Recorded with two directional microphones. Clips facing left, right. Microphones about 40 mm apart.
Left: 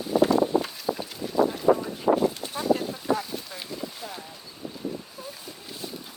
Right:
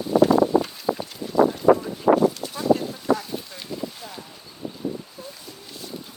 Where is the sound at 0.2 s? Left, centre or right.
Centre.